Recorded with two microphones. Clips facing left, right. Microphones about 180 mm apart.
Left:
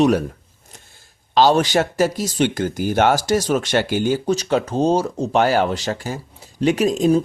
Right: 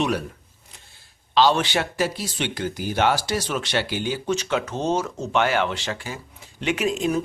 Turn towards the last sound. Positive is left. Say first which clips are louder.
# left 7 dB
turn(degrees=35)  # may be behind; listen again after turning